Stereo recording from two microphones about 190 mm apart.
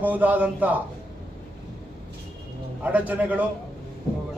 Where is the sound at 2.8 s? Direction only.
10° right (ahead or behind).